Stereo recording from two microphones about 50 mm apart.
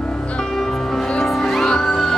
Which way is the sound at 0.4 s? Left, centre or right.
Centre.